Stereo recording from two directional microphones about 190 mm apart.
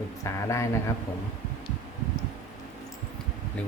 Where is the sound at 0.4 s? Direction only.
15° left (ahead or behind).